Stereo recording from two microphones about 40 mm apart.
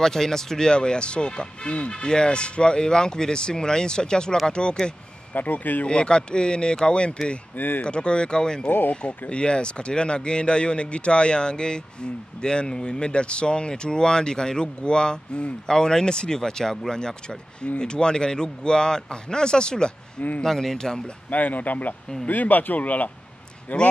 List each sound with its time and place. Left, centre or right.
0.0 s speech: centre
5.3 s speech: left
5.9 s speech: left
7.5 s speech: left
7.8 s speech: left
8.6 s speech: left
9.3 s speech: left
20.2 s speech: left
20.4 s speech: centre
21.3 s speech: left